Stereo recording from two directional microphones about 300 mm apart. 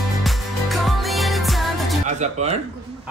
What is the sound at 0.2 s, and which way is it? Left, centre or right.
Music, centre.